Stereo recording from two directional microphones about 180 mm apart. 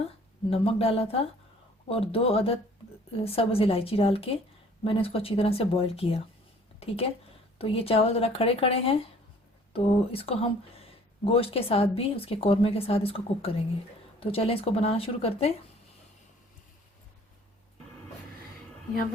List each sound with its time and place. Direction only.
0.5 s speech: 30° left (ahead or behind)